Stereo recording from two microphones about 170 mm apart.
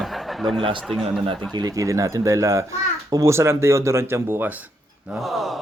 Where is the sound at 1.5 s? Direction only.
25° right (ahead or behind).